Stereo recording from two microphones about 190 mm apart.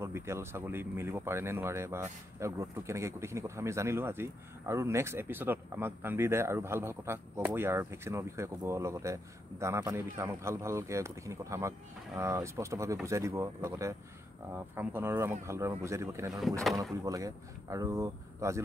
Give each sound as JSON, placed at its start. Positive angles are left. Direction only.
{"t": 0.0, "sound": "speech", "side_deg": -15}